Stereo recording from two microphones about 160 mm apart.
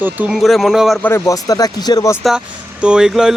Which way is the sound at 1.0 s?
15° left (ahead or behind).